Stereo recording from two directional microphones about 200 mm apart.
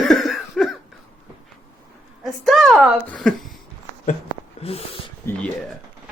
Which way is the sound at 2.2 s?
Centre (ahead or behind).